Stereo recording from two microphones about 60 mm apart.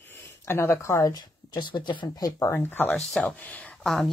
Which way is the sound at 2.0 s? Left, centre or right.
Left.